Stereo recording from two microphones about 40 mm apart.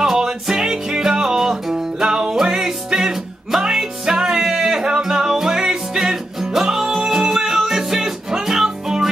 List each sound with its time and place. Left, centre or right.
0.0 s music: centre